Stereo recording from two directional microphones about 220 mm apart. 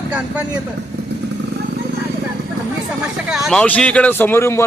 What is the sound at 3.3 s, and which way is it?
Speech, centre (ahead or behind).